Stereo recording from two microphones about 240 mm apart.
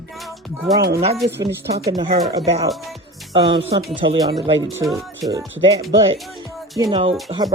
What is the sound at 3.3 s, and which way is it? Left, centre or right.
Speech, right.